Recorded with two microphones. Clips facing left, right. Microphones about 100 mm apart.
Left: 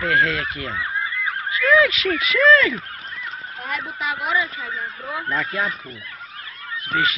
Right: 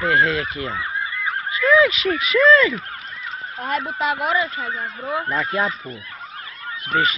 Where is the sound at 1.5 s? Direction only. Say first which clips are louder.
Right 1 dB; 25° right (ahead or behind).